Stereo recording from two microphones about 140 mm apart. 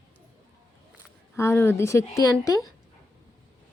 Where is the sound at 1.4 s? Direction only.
15° left (ahead or behind).